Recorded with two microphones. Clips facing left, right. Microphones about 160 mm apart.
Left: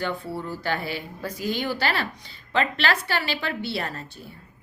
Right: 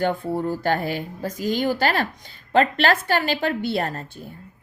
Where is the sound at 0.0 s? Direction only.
50° right (ahead or behind).